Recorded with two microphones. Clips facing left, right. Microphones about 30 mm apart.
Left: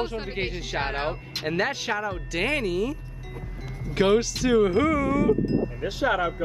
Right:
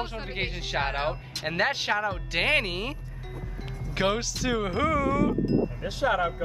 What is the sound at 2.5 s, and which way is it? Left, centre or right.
Speech, right.